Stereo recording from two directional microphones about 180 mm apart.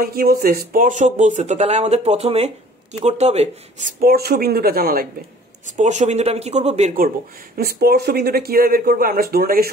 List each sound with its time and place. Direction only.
0.0 s speech: 55° right (ahead or behind); by 3.9 s 40° right (ahead or behind)
4.0 s speech: 60° right (ahead or behind)
5.7 s speech: 40° right (ahead or behind)
7.5 s speech: 60° right (ahead or behind)